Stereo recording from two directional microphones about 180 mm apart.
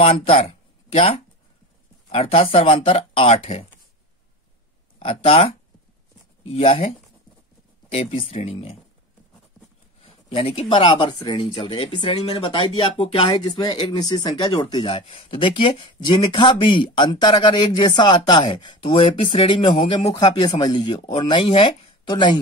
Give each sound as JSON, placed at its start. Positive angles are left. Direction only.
{"t": 0.0, "sound": "speech", "side_deg": 30}
{"t": 4.9, "sound": "speech", "side_deg": 30}
{"t": 7.9, "sound": "speech", "side_deg": 30}
{"t": 10.0, "sound": "speech", "side_deg": 30}